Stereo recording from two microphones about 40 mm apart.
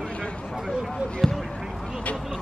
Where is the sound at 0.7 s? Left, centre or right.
Right.